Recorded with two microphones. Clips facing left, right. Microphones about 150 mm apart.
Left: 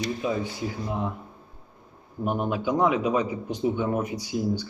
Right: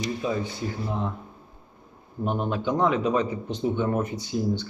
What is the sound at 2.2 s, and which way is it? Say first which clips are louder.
A man's voice: even; 10° left (ahead or behind).